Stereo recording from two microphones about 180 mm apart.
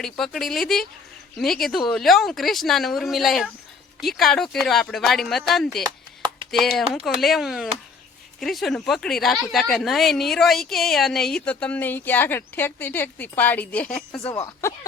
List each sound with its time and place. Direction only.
0.0 s a woman's voice: centre (ahead or behind)
5.8 s chop: 25° right (ahead or behind)
6.5 s a woman's voice: centre (ahead or behind)